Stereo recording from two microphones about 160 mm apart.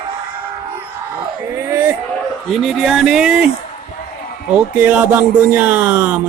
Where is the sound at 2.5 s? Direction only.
Centre (ahead or behind).